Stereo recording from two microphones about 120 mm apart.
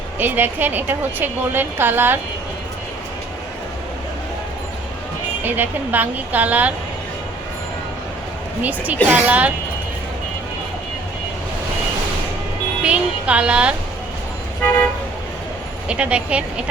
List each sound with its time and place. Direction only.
0.2 s a woman's voice: 15° right (ahead or behind)
5.4 s a woman's voice: 15° right (ahead or behind)
8.6 s a woman's voice: 15° right (ahead or behind)
12.8 s a woman's voice: 10° right (ahead or behind)
15.9 s a woman's voice: 10° right (ahead or behind)